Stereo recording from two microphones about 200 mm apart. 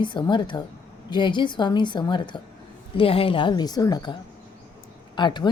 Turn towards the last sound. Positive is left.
turn(degrees=25)  # may be behind; listen again after turning